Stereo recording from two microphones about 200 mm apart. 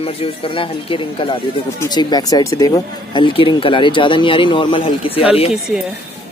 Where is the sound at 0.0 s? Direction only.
25° left (ahead or behind).